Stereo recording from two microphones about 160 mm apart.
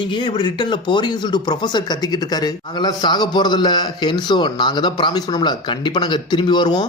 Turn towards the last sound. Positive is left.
turn(degrees=25)  # may be behind; listen again after turning